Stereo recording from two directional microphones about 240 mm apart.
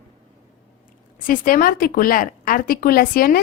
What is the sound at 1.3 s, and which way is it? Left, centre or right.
Speech, left.